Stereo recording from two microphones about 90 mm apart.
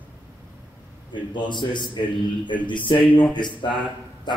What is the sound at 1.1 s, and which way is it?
A man's voice, 60° left (ahead or behind).